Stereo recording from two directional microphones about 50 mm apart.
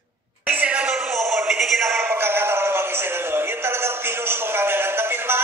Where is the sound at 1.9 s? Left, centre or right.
Right.